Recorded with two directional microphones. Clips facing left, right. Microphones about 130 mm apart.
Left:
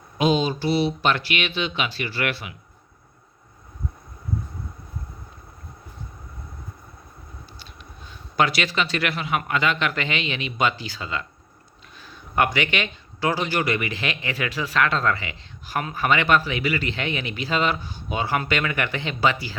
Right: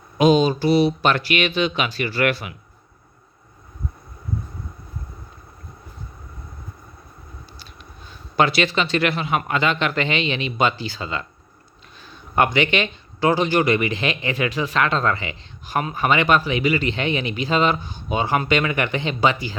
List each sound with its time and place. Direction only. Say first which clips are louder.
0.2 s speech: right 5 dB; 45° right (ahead or behind)
8.4 s a man's voice: right 3 dB; 25° right (ahead or behind)